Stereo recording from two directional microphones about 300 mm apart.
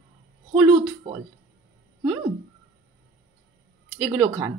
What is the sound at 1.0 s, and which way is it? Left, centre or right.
Speech, centre.